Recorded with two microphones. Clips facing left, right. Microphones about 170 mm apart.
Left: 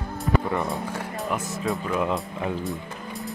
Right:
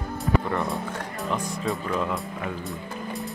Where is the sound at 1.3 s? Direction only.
10° left (ahead or behind).